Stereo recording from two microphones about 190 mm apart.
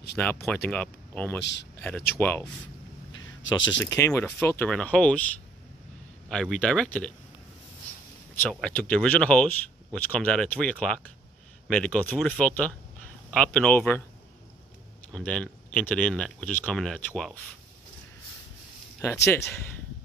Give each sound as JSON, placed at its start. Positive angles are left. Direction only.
{"t": 0.2, "sound": "speech", "side_deg": 10}
{"t": 2.6, "sound": "a sound", "side_deg": 80}
{"t": 3.8, "sound": "speech", "side_deg": 15}
{"t": 8.5, "sound": "speech", "side_deg": 5}
{"t": 15.1, "sound": "speech", "side_deg": 5}